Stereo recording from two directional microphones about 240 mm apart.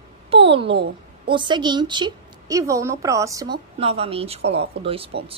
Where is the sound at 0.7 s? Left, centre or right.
Right.